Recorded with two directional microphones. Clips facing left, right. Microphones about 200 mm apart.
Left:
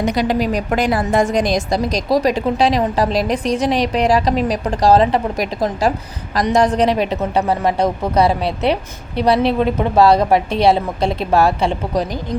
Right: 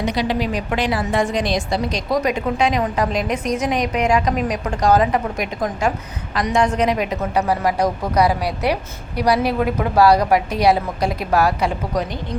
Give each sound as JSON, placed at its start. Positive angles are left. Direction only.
{"t": 0.0, "sound": "a woman's voice", "side_deg": 45}